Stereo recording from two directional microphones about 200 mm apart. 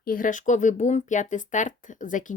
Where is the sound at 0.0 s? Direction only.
45° left (ahead or behind).